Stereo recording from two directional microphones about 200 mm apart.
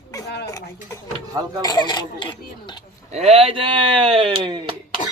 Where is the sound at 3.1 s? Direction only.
30° right (ahead or behind).